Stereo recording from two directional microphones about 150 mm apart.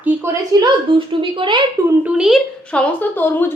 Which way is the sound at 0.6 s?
35° right (ahead or behind).